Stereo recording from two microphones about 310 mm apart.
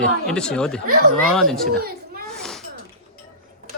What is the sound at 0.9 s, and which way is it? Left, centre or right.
Speech, right.